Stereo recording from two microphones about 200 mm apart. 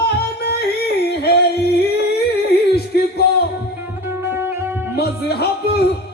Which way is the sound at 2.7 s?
55° left (ahead or behind).